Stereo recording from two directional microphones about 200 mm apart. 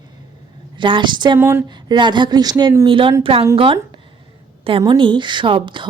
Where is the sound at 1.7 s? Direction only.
20° right (ahead or behind).